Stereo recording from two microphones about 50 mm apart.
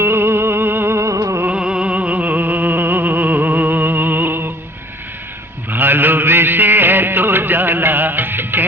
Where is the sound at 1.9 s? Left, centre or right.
Right.